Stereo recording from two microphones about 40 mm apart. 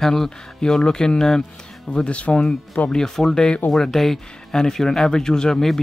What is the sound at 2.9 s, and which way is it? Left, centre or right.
Speech, centre.